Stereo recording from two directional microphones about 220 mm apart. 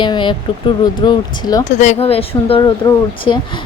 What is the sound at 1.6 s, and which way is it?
A woman's voice, 30° left (ahead or behind).